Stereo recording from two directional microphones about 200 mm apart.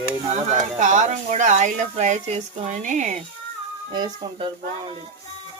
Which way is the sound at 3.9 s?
25° right (ahead or behind).